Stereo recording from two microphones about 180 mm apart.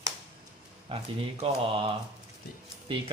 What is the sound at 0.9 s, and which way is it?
Speech, 30° right (ahead or behind).